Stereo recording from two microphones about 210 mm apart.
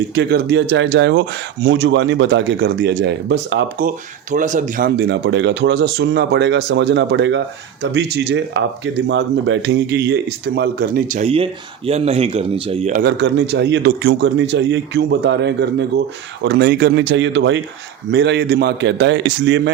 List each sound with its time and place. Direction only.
0.1 s speech: 50° right (ahead or behind)
3.8 s speech: 40° right (ahead or behind)
4.9 s speech: 55° right (ahead or behind); by 12.9 s 25° right (ahead or behind)
12.9 s speech: 50° right (ahead or behind)